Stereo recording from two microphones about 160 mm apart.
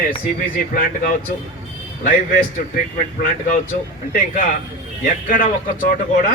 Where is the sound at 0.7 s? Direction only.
60° left (ahead or behind).